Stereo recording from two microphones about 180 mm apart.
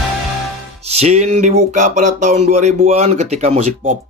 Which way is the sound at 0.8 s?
35° right (ahead or behind).